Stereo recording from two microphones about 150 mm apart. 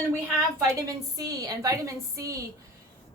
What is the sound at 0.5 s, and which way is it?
A woman's voice, 20° right (ahead or behind).